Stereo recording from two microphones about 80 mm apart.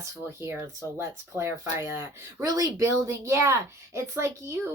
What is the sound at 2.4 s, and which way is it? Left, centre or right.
Speech, right.